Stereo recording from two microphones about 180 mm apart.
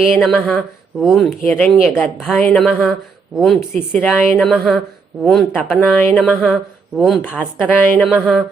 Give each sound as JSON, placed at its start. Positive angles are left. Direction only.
{"t": 0.0, "sound": "a woman's voice", "side_deg": 0}
{"t": 7.2, "sound": "a woman's voice", "side_deg": 10}